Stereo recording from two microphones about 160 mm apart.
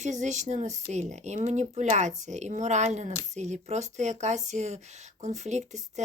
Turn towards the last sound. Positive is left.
turn(degrees=-45)  # may be behind; listen again after turning